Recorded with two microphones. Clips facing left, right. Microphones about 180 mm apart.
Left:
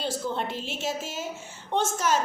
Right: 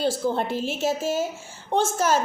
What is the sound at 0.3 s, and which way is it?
A woman's voice, 40° right (ahead or behind).